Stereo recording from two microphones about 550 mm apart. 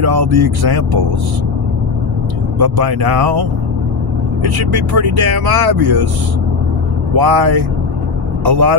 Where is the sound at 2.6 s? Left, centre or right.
Right.